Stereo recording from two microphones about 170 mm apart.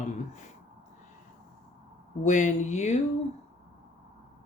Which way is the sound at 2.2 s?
45° left (ahead or behind).